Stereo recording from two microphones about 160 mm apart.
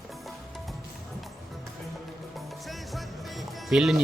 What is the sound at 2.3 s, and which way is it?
Music, centre (ahead or behind).